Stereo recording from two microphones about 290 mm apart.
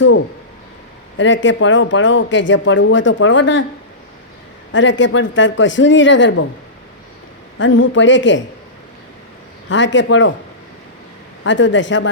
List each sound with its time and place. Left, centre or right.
1.2 s speech: left
4.7 s speech: left
7.6 s speech: left
9.6 s speech: left
11.4 s speech: left